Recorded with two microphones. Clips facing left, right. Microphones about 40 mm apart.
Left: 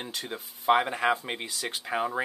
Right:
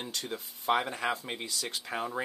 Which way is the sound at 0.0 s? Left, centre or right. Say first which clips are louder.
Left 1 dB; centre.